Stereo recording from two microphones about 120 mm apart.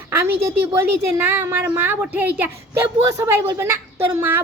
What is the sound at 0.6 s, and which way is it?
A woman's voice, 20° right (ahead or behind).